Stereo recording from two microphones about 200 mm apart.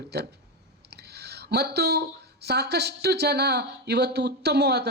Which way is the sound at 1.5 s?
55° right (ahead or behind).